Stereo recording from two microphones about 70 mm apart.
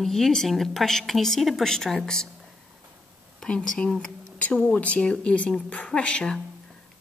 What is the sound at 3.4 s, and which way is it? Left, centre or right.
A woman's voice, centre.